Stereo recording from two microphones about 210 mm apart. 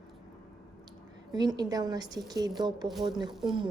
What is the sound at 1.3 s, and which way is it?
A woman's voice, 20° right (ahead or behind).